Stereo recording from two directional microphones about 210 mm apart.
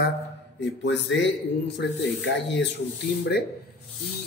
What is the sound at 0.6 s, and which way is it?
Speech, 60° left (ahead or behind).